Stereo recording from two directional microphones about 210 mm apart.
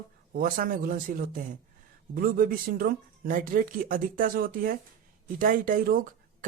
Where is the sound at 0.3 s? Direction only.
40° right (ahead or behind).